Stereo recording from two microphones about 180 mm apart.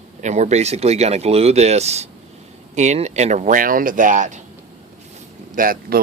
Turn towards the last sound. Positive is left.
turn(degrees=-55)  # may be behind; listen again after turning